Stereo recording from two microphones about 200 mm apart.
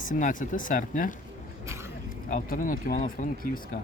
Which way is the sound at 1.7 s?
15° right (ahead or behind).